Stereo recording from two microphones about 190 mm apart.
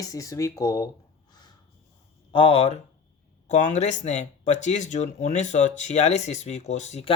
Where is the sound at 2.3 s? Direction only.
30° left (ahead or behind).